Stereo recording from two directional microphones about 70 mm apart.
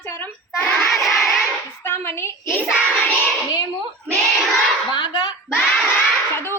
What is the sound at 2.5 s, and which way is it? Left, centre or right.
Child singing, centre.